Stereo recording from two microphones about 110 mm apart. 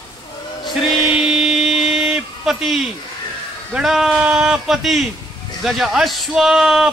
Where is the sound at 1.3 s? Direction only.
Centre (ahead or behind).